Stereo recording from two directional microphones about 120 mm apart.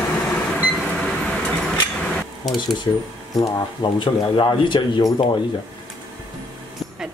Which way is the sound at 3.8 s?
40° left (ahead or behind).